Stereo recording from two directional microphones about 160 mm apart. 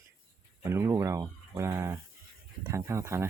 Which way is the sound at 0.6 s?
15° right (ahead or behind).